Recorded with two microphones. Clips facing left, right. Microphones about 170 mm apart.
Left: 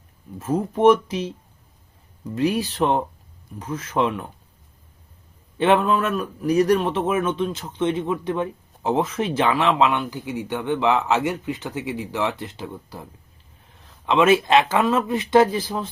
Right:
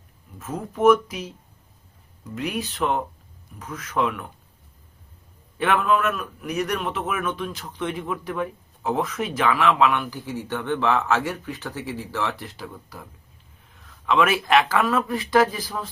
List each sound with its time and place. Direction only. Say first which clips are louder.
0.3 s a man's voice: left 6 dB; 30° left (ahead or behind)
2.3 s a man's voice: left 7 dB; 35° left (ahead or behind)
5.5 s a man's voice: left 3 dB; 25° left (ahead or behind)